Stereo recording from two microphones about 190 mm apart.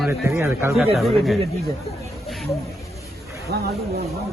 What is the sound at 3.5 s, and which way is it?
Speech, 60° right (ahead or behind).